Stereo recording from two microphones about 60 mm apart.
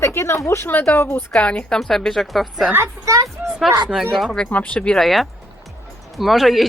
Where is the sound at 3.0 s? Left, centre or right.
Right.